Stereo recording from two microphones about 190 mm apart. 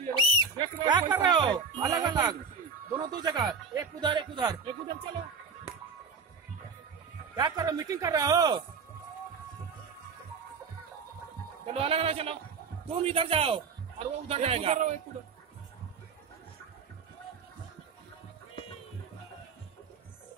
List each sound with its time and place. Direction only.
0.1 s music: 25° right (ahead or behind)
3.0 s speech: 20° right (ahead or behind)
7.3 s speech: 20° right (ahead or behind)
11.6 s a man's voice: 30° right (ahead or behind)